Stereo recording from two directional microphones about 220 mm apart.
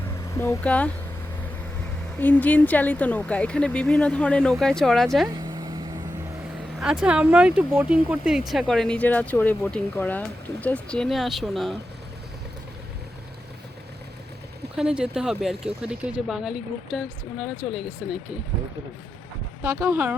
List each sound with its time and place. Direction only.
0.3 s speech: 10° left (ahead or behind)
2.2 s speech: 5° left (ahead or behind)
5.3 s vehicle: 20° right (ahead or behind)
6.7 s speech: 5° right (ahead or behind)
14.8 s speech: 5° right (ahead or behind)
19.6 s speech: 10° right (ahead or behind)